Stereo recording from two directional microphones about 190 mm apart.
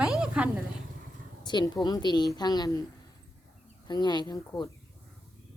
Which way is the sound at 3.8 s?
20° left (ahead or behind).